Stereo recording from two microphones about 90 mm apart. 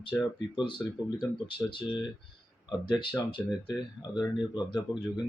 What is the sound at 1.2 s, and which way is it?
Speech, 60° left (ahead or behind).